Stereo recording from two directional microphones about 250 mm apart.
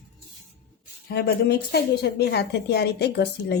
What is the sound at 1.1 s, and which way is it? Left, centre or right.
A woman's voice, left.